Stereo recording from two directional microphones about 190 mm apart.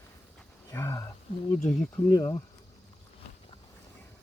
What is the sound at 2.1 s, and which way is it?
Speech, 20° left (ahead or behind).